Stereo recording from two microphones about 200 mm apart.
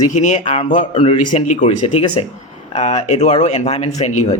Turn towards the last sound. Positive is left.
turn(degrees=35)  # may be behind; listen again after turning